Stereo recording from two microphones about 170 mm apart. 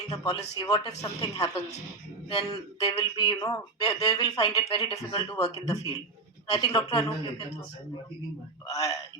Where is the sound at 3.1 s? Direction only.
25° left (ahead or behind).